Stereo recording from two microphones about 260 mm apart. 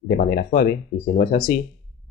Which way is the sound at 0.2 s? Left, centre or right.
Left.